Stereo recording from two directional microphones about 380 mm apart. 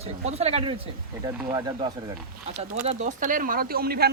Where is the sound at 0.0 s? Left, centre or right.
Centre.